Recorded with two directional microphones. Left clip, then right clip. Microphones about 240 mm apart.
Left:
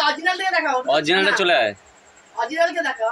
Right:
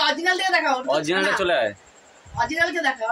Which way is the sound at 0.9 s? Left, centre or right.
Centre.